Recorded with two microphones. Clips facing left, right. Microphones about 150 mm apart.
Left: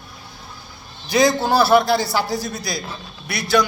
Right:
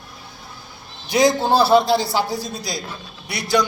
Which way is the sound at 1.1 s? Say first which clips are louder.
Even; 15° right (ahead or behind).